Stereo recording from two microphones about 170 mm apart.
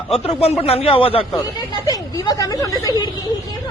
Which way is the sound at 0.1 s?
35° left (ahead or behind).